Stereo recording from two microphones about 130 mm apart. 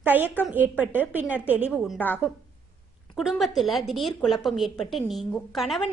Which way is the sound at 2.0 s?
15° left (ahead or behind).